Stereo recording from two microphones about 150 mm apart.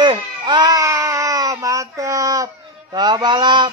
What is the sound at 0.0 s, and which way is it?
Baby cry, 30° right (ahead or behind).